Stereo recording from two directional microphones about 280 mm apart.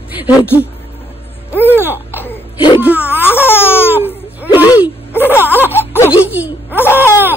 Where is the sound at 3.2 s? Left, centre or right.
Centre.